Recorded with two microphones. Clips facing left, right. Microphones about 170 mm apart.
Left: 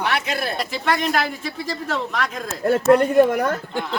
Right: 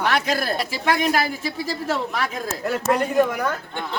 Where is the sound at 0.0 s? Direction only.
40° right (ahead or behind).